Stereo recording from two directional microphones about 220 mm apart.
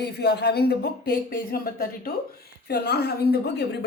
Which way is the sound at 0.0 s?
50° left (ahead or behind).